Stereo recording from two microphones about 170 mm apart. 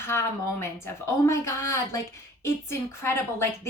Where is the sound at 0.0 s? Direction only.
15° left (ahead or behind).